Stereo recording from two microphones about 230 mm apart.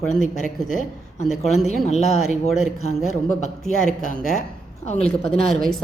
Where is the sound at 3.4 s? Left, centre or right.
Left.